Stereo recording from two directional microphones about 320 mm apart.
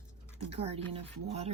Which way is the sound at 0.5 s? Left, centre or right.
Centre.